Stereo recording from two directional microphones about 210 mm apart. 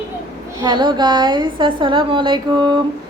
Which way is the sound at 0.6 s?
20° right (ahead or behind).